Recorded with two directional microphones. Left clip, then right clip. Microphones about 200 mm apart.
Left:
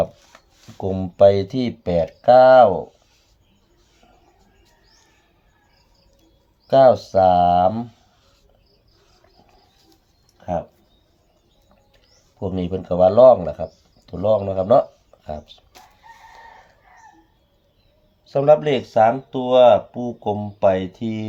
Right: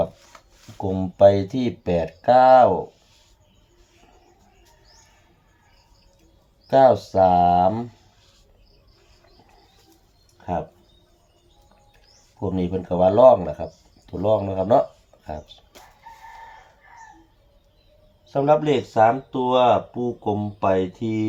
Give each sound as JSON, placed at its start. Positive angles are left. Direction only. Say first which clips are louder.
{"t": 0.9, "sound": "speech", "louder": "left 1 dB", "side_deg": 55}
{"t": 6.7, "sound": "speech", "louder": "left 2 dB", "side_deg": 55}
{"t": 12.4, "sound": "speech", "louder": "even", "side_deg": 55}
{"t": 18.3, "sound": "speech", "louder": "left 3 dB", "side_deg": 55}